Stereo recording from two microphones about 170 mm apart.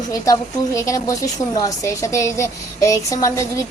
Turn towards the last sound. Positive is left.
turn(degrees=20)  # may be behind; listen again after turning